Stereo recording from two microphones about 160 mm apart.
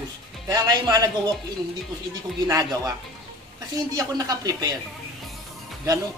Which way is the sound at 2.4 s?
20° right (ahead or behind).